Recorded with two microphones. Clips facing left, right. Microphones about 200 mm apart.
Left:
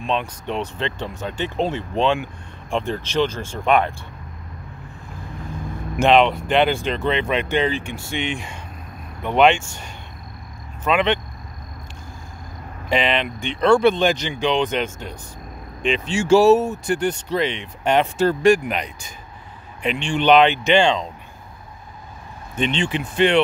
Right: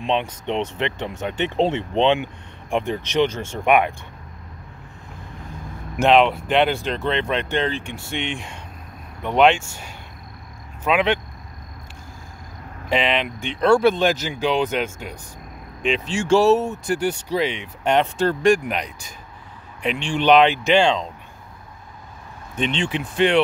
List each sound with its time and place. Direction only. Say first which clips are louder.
0.0 s speech: right 1 dB; 20° right (ahead or behind)
5.9 s speech: even; 5° right (ahead or behind)
12.9 s speech: left 1 dB; centre (ahead or behind)
17.9 s speech: left 2 dB; 5° left (ahead or behind)
22.6 s speech: left 1 dB; centre (ahead or behind)